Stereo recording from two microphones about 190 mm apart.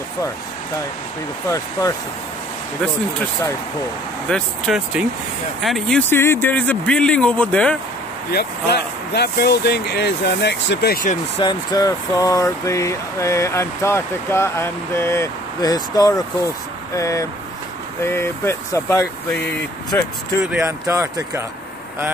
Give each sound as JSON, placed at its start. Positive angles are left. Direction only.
{"t": 1.5, "sound": "speech", "side_deg": 15}
{"t": 4.3, "sound": "speech", "side_deg": 0}
{"t": 8.3, "sound": "speech", "side_deg": 60}
{"t": 11.3, "sound": "speech", "side_deg": 20}
{"t": 20.6, "sound": "speech", "side_deg": -15}